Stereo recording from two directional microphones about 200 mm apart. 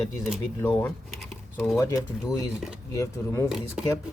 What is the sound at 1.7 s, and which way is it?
Speech, 15° left (ahead or behind).